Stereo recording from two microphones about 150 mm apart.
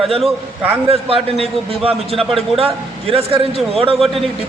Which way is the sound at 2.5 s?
40° right (ahead or behind).